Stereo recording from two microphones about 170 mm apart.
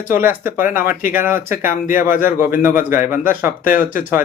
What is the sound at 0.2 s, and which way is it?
Speech, 15° right (ahead or behind).